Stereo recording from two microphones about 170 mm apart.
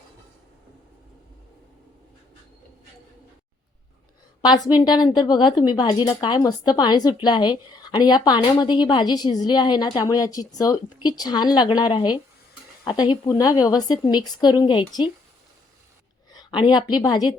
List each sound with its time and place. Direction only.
4.4 s a woman's voice: 25° left (ahead or behind)
16.3 s a woman's voice: 25° left (ahead or behind)